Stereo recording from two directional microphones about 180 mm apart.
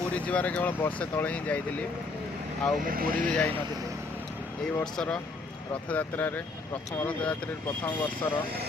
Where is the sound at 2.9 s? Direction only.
50° right (ahead or behind).